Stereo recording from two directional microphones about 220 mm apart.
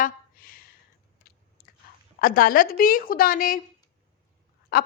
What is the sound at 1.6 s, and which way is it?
Chewing, 45° left (ahead or behind).